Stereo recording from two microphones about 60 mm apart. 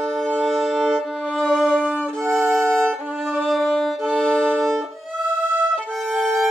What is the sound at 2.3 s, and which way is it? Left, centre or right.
Music, right.